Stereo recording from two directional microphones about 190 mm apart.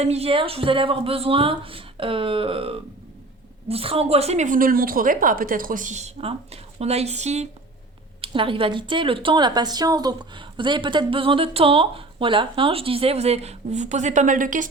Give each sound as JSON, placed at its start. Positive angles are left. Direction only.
{"t": 0.0, "sound": "a woman's voice", "side_deg": -35}